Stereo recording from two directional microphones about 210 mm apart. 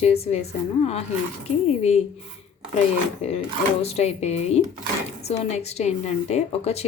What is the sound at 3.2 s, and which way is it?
A woman's voice, 30° left (ahead or behind).